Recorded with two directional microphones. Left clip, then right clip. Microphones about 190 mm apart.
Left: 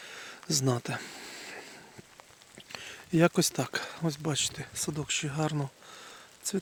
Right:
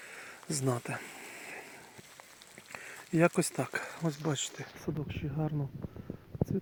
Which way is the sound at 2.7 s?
40° left (ahead or behind).